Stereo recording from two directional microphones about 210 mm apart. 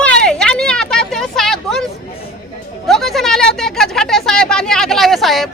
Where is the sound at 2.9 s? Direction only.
Centre (ahead or behind).